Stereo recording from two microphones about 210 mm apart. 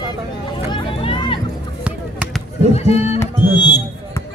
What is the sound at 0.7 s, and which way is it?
Vehicle, 25° left (ahead or behind).